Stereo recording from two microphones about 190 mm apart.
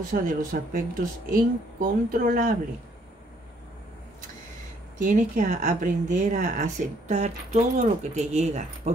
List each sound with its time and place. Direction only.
0.1 s speech: 45° right (ahead or behind)
4.9 s speech: 40° right (ahead or behind)